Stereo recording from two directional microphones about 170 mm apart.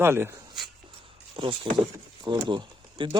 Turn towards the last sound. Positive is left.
turn(degrees=-30)  # may be behind; listen again after turning